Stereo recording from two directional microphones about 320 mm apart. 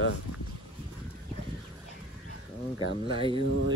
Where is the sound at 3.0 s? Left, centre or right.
Centre.